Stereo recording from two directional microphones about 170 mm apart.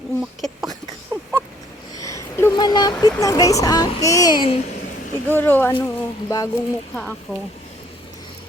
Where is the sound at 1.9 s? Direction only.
20° left (ahead or behind).